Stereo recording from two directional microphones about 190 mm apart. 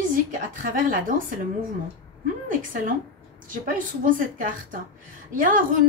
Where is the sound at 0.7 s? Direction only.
45° right (ahead or behind).